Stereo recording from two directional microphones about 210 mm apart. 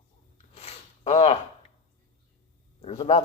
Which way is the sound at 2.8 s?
30° left (ahead or behind).